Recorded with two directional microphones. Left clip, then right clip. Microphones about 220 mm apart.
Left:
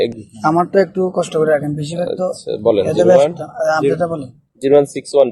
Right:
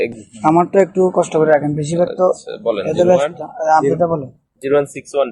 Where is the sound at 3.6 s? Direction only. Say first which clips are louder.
Right 2 dB; centre (ahead or behind).